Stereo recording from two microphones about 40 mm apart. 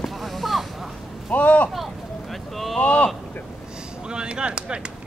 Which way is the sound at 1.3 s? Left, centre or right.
Left.